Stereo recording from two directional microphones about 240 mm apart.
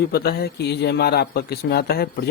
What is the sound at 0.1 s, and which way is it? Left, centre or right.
A man's voice, left.